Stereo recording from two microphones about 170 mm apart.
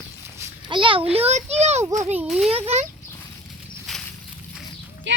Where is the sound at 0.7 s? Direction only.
30° right (ahead or behind).